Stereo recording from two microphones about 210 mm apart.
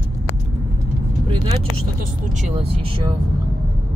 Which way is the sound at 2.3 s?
30° right (ahead or behind).